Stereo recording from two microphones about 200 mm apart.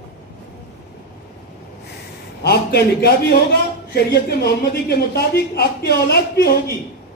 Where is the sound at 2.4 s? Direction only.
55° left (ahead or behind).